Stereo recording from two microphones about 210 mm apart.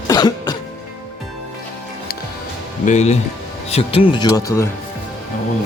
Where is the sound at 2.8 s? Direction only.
35° left (ahead or behind); by 4.7 s 15° left (ahead or behind).